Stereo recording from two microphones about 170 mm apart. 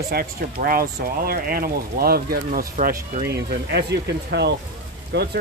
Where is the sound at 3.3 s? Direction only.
75° right (ahead or behind).